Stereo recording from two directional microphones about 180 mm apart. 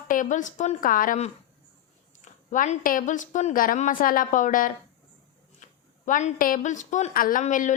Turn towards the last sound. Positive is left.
turn(degrees=45)  # may be behind; listen again after turning